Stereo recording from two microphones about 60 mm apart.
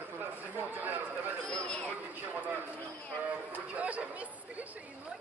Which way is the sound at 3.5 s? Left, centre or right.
Right.